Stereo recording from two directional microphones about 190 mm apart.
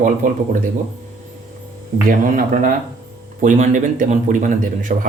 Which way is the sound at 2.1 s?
45° right (ahead or behind).